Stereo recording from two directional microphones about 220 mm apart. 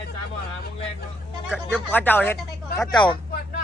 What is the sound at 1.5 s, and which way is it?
A man's voice, centre (ahead or behind).